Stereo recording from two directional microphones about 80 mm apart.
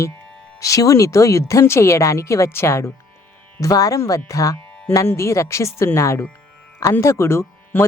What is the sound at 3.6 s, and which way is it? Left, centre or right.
Speech, left.